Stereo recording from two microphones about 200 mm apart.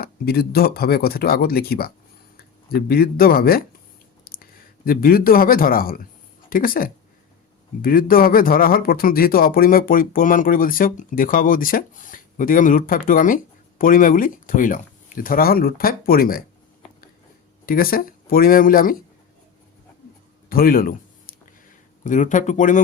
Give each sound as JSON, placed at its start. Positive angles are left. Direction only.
{"t": 0.0, "sound": "speech", "side_deg": 50}
{"t": 4.3, "sound": "a sound", "side_deg": 50}
{"t": 4.9, "sound": "speech", "side_deg": 45}
{"t": 17.7, "sound": "speech", "side_deg": 45}
{"t": 20.5, "sound": "a sound", "side_deg": 45}
{"t": 22.0, "sound": "speech", "side_deg": 40}